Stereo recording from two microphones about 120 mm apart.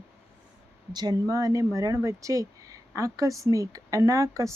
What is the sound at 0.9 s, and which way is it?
Speech, 30° right (ahead or behind).